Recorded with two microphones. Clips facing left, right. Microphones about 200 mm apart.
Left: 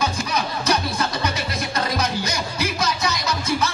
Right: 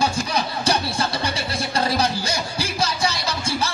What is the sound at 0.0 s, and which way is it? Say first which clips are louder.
Music: right 1 dB; 30° right (ahead or behind).